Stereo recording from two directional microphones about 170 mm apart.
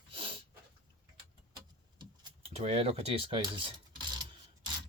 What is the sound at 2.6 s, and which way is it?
Speech, 35° right (ahead or behind).